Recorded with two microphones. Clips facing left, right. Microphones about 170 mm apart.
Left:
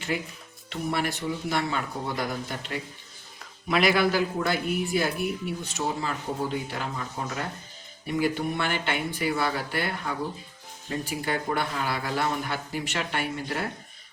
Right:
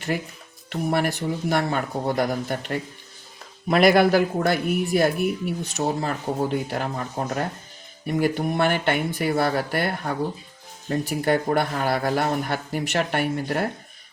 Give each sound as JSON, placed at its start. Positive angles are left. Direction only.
{"t": 0.7, "sound": "a man's voice", "side_deg": -50}